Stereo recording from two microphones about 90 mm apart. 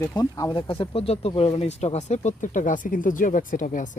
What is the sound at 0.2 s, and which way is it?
Speech, 40° left (ahead or behind).